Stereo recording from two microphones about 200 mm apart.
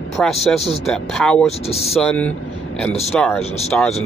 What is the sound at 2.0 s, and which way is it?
Speech, 5° left (ahead or behind).